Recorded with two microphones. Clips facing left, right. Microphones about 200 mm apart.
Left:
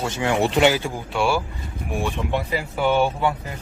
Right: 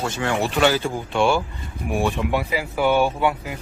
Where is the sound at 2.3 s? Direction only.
5° right (ahead or behind).